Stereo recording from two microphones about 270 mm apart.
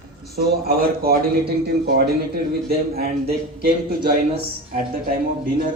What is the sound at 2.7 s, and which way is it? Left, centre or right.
Speech, right.